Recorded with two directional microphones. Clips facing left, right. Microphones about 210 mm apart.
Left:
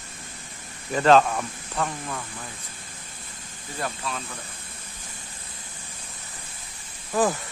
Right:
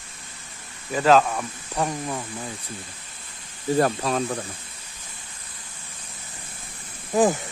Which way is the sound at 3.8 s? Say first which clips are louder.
Right 4 dB; 45° right (ahead or behind).